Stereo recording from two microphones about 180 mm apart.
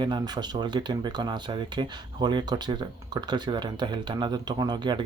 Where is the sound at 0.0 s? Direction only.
25° right (ahead or behind).